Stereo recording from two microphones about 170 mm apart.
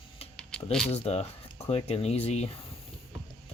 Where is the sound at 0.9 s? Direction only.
40° left (ahead or behind).